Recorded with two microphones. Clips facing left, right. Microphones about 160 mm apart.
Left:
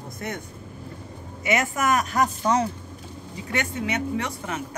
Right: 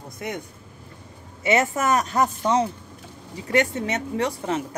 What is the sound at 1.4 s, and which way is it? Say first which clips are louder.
Speech: right 2 dB; 30° right (ahead or behind).